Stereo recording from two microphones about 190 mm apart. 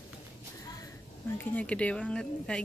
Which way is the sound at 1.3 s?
5° left (ahead or behind).